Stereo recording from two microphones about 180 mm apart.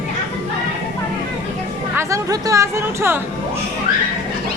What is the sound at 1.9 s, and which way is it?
Speech, 15° right (ahead or behind).